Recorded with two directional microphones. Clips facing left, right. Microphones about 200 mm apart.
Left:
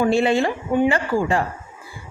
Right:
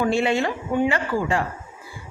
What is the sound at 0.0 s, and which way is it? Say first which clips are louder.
A woman's voice: left 3 dB; 35° left (ahead or behind).